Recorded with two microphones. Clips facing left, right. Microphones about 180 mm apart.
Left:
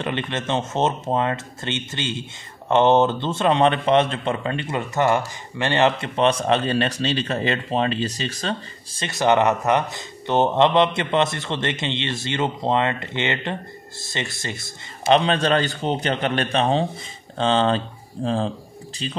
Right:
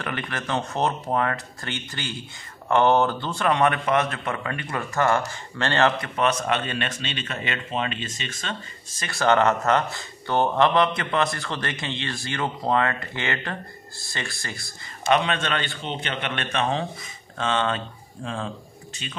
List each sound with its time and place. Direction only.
0.0 s a man's voice: 25° left (ahead or behind)